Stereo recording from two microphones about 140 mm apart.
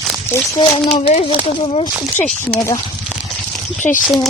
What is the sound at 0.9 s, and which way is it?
Speech, 45° left (ahead or behind).